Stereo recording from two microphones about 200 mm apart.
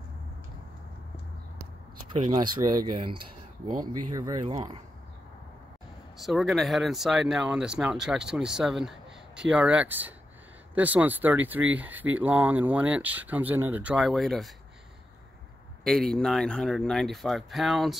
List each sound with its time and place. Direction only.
2.1 s speech: 20° right (ahead or behind)
6.1 s speech: centre (ahead or behind)
15.8 s speech: centre (ahead or behind)